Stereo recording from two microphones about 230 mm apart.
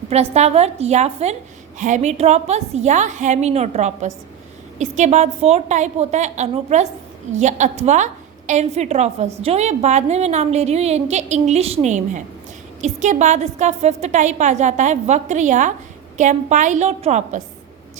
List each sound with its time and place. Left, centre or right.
0.1 s a woman's voice: right